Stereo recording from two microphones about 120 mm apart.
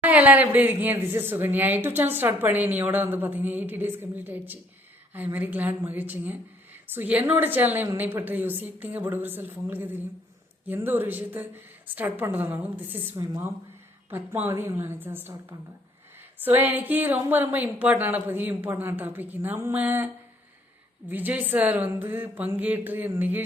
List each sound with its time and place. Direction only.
0.0 s speech: 15° right (ahead or behind)
13.2 s speech: 30° right (ahead or behind)
14.1 s speech: 20° right (ahead or behind)
21.1 s speech: 15° right (ahead or behind)